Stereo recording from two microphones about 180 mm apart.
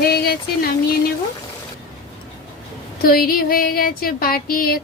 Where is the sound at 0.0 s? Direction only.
60° left (ahead or behind).